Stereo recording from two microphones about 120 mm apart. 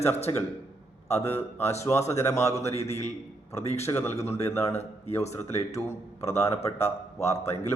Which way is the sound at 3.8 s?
20° left (ahead or behind).